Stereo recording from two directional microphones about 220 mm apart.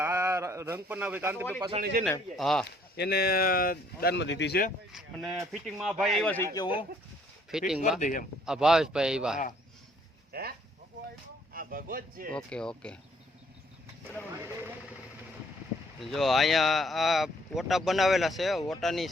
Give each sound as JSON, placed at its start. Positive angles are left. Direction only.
{"t": 0.0, "sound": "speech", "side_deg": -10}
{"t": 1.8, "sound": "a man's voice", "side_deg": -45}
{"t": 2.3, "sound": "speech", "side_deg": 0}
{"t": 2.9, "sound": "speech", "side_deg": 45}
{"t": 4.9, "sound": "speech", "side_deg": 0}
{"t": 6.2, "sound": "a man's voice", "side_deg": 10}
{"t": 7.5, "sound": "speech", "side_deg": 0}
{"t": 7.9, "sound": "speech", "side_deg": 35}
{"t": 8.4, "sound": "speech", "side_deg": 0}
{"t": 11.5, "sound": "speech", "side_deg": -40}
{"t": 12.3, "sound": "speech", "side_deg": 5}
{"t": 14.4, "sound": "speech", "side_deg": -10}
{"t": 16.0, "sound": "speech", "side_deg": 0}